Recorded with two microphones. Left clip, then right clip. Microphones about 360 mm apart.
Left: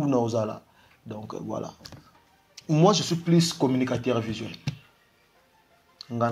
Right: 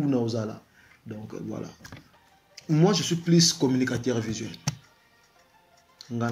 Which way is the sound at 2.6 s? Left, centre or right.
Centre.